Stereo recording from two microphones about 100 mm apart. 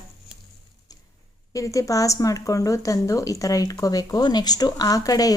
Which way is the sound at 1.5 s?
35° left (ahead or behind).